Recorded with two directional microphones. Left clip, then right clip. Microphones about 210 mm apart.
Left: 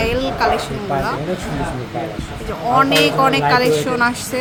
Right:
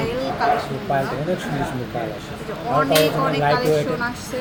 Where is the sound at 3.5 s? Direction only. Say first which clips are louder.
Left 4 dB; 40° left (ahead or behind).